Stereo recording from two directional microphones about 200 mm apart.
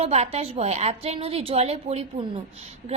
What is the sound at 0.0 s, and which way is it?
A woman's voice, 30° right (ahead or behind).